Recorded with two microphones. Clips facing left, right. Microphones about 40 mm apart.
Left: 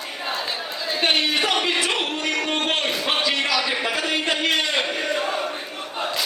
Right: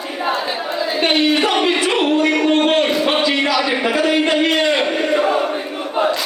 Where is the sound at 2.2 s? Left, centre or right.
Right.